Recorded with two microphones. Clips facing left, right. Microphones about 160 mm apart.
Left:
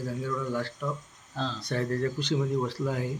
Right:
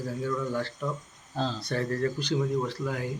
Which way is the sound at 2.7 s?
30° left (ahead or behind).